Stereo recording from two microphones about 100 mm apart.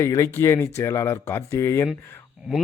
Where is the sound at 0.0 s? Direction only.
30° left (ahead or behind).